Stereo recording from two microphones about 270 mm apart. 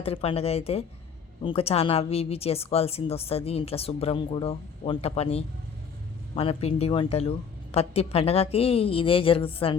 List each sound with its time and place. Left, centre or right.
0.0 s a woman's voice: left